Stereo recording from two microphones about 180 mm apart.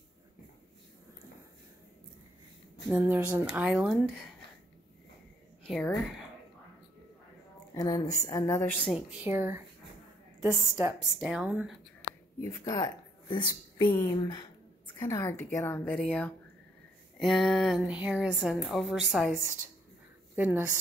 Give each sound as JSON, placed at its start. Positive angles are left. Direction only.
{"t": 2.9, "sound": "speech", "side_deg": -10}
{"t": 5.7, "sound": "a woman's voice", "side_deg": 0}
{"t": 7.7, "sound": "a woman's voice", "side_deg": 20}
{"t": 8.9, "sound": "speech", "side_deg": -10}
{"t": 11.0, "sound": "a woman's voice", "side_deg": -5}
{"t": 12.4, "sound": "a woman's voice", "side_deg": 15}